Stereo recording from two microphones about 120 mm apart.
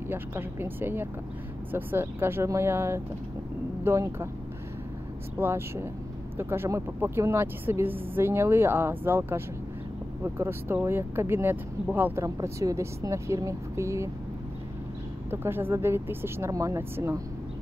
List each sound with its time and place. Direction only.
0.1 s speech: 20° right (ahead or behind)
5.4 s speech: 20° right (ahead or behind)
12.4 s speech: 25° right (ahead or behind)
15.3 s speech: 20° right (ahead or behind)